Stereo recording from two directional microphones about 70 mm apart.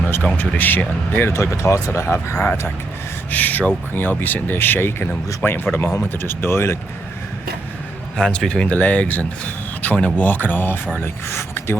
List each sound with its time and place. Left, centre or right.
0.1 s speech: left
1.3 s speech: left
8.1 s speech: centre; by 11.8 s left